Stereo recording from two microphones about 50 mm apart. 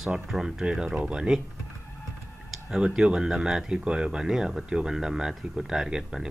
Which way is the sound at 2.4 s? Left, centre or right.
Centre.